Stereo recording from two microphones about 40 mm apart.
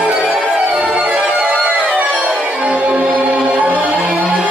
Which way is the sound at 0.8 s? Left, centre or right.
Right.